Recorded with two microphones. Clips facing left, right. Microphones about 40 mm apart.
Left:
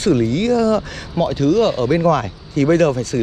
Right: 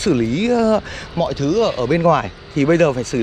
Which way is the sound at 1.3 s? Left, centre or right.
Centre.